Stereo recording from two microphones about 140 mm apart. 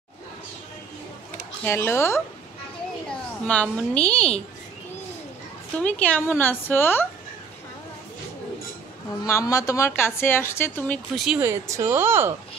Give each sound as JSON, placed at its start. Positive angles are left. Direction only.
{"t": 1.6, "sound": "speech", "side_deg": 20}
{"t": 3.4, "sound": "a woman's voice", "side_deg": 10}
{"t": 5.8, "sound": "a woman's voice", "side_deg": 10}
{"t": 9.2, "sound": "a woman's voice", "side_deg": 25}
{"t": 11.1, "sound": "speech", "side_deg": -5}
{"t": 11.4, "sound": "speech", "side_deg": -20}